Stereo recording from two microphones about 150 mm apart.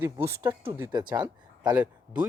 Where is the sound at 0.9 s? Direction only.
30° right (ahead or behind).